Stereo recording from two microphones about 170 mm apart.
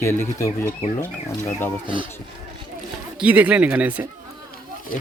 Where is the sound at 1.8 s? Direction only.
30° right (ahead or behind).